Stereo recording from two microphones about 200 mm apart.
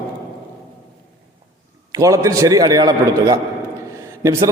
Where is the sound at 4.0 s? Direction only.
15° right (ahead or behind).